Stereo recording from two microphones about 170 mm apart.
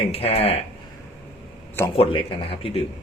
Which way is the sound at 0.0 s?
35° left (ahead or behind).